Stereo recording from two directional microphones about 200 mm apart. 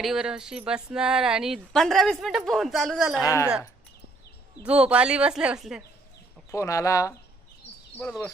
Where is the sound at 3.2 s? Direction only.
15° left (ahead or behind).